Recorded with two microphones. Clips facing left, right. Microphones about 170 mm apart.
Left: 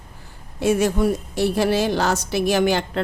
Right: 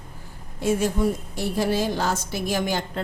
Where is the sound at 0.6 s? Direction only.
75° left (ahead or behind).